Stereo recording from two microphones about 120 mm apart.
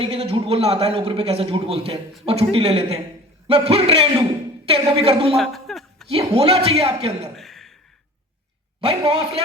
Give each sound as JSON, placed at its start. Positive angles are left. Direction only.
{"t": 0.0, "sound": "a man's voice", "side_deg": -55}
{"t": 5.4, "sound": "chuckle", "side_deg": 0}
{"t": 6.1, "sound": "a man's voice", "side_deg": -55}
{"t": 7.3, "sound": "a sound", "side_deg": 0}
{"t": 8.8, "sound": "a man's voice", "side_deg": -55}